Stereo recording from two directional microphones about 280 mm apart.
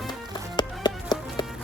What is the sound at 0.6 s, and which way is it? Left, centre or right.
Music, centre.